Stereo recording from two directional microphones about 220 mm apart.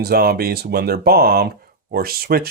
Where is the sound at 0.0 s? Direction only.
45° right (ahead or behind).